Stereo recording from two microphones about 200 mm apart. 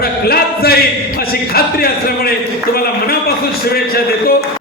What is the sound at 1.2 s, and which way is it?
A man's voice, 50° left (ahead or behind).